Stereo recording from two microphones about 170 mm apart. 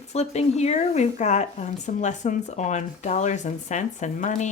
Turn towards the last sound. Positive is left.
turn(degrees=45)  # may be behind; listen again after turning